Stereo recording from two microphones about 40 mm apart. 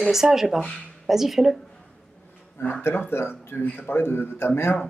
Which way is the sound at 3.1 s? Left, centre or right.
Left.